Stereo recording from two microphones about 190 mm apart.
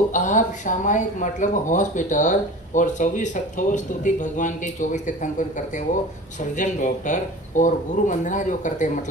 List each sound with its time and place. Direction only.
0.1 s speech: 40° left (ahead or behind)
6.5 s speech: 40° left (ahead or behind)